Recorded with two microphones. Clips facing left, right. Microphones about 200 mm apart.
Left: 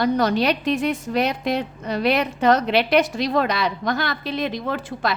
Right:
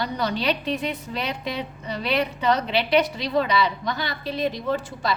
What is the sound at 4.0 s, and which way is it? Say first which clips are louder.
A woman's voice: left 3 dB; 90° left.